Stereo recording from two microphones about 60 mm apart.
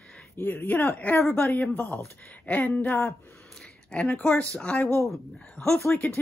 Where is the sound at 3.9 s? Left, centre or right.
Centre.